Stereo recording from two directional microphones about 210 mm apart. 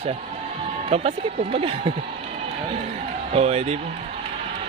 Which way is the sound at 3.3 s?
30° right (ahead or behind).